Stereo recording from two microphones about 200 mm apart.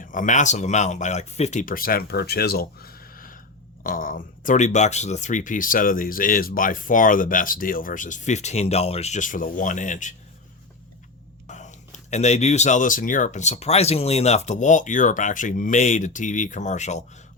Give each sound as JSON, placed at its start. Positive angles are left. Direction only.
{"t": 0.0, "sound": "speech", "side_deg": 40}
{"t": 11.4, "sound": "speech", "side_deg": 35}